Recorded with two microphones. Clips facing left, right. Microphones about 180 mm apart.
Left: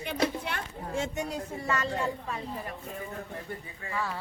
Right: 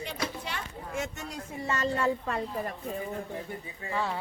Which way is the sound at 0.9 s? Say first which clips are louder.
Left 2 dB; 30° left (ahead or behind).